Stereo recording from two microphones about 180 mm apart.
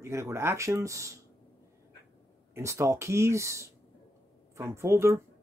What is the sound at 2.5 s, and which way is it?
Speech, 15° right (ahead or behind).